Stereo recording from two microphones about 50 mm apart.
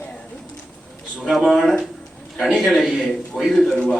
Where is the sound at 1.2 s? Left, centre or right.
Centre.